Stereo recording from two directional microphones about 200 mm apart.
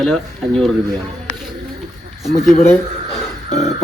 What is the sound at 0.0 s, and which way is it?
Speech, centre (ahead or behind).